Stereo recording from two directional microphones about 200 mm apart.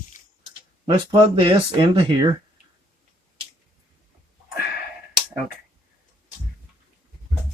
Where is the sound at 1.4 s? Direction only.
25° right (ahead or behind).